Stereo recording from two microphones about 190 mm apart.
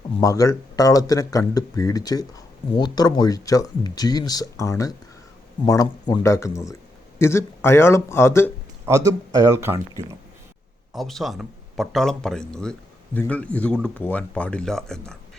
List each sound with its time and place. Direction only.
0.2 s a man's voice: 15° left (ahead or behind)
8.9 s speech: 15° right (ahead or behind)
10.9 s a man's voice: centre (ahead or behind)